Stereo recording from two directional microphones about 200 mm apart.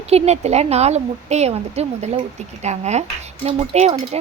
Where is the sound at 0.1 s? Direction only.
30° right (ahead or behind).